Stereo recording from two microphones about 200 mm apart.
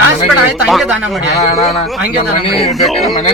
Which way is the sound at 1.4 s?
30° left (ahead or behind).